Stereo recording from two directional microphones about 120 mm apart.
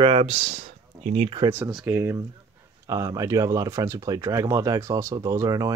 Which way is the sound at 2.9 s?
30° right (ahead or behind).